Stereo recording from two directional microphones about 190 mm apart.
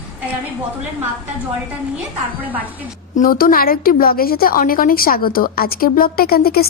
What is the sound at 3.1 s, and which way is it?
A woman's voice, 50° left (ahead or behind).